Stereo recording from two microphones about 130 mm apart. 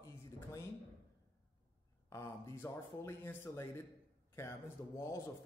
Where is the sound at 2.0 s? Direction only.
25° left (ahead or behind).